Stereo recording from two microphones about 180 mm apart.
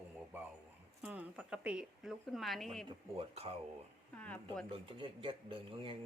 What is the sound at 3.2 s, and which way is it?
Speech, 35° right (ahead or behind).